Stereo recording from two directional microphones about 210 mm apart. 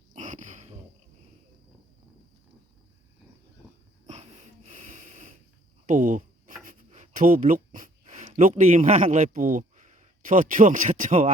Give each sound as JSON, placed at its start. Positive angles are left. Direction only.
{"t": 0.1, "sound": "a sound", "side_deg": -35}
{"t": 4.0, "sound": "wheeze", "side_deg": -35}
{"t": 5.8, "sound": "speech", "side_deg": -40}